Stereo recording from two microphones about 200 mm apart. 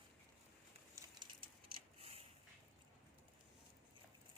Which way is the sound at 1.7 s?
30° right (ahead or behind).